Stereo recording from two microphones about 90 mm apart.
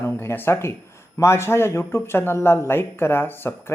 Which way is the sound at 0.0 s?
25° left (ahead or behind).